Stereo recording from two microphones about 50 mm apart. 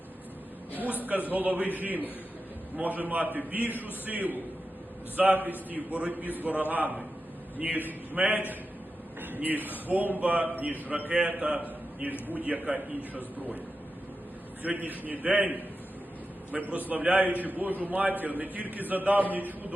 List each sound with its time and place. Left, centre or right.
1.0 s a man's voice: right
14.6 s a man's voice: right